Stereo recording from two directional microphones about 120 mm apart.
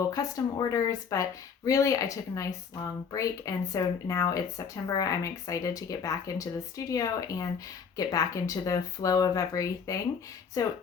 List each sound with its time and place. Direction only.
0.1 s speech: 30° left (ahead or behind)